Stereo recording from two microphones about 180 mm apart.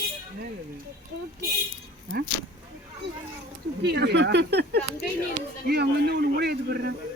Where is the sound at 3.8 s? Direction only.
65° right (ahead or behind).